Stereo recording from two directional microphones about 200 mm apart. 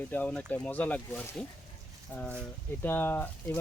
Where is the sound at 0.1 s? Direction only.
5° left (ahead or behind).